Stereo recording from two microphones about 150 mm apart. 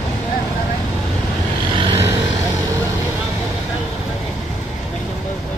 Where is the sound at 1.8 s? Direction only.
35° right (ahead or behind).